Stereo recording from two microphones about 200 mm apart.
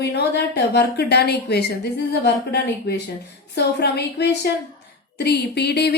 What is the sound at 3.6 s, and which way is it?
A woman's voice, 55° left (ahead or behind).